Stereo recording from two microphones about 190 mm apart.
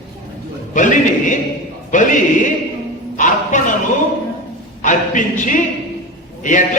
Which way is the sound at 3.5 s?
40° left (ahead or behind).